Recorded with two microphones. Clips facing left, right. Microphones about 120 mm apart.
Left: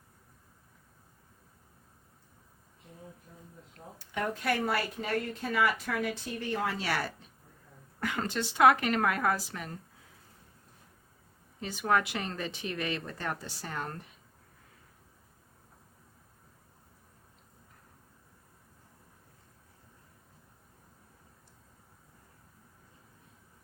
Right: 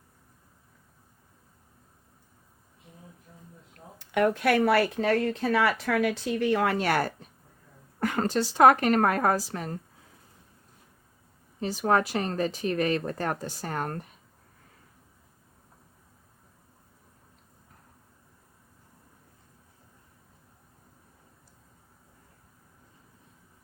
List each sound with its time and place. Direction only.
3.9 s a woman's voice: 70° right (ahead or behind); by 9.7 s 40° right (ahead or behind)
11.6 s a woman's voice: 35° right (ahead or behind)